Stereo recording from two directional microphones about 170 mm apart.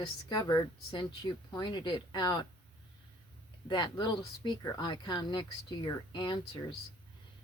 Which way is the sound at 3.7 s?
25° left (ahead or behind).